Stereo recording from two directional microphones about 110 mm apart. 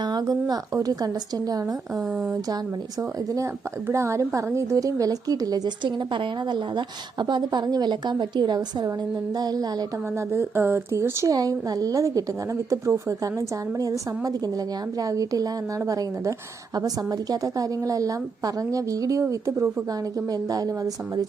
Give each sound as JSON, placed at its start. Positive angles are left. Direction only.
{"t": 0.0, "sound": "a woman's voice", "side_deg": -40}
{"t": 3.8, "sound": "a woman's voice", "side_deg": -25}
{"t": 10.2, "sound": "a woman's voice", "side_deg": -25}